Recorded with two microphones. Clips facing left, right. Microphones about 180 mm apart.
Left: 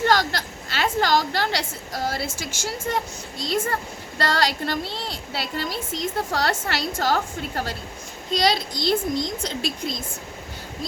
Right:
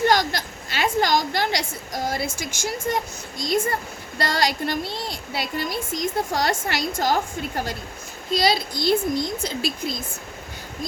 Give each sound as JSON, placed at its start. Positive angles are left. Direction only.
{"t": 0.0, "sound": "a woman's voice", "side_deg": -15}